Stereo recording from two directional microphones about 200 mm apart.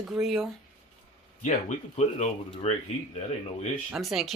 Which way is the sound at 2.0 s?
35° left (ahead or behind).